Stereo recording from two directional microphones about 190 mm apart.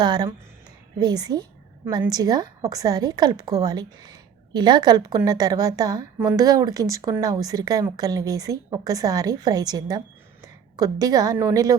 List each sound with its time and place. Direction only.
0.0 s a woman's voice: 20° right (ahead or behind)